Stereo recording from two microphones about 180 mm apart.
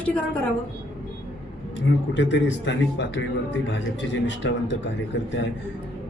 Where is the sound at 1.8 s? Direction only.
90° left.